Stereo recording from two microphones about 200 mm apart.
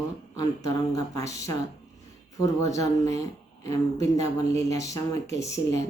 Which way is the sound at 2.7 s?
15° left (ahead or behind).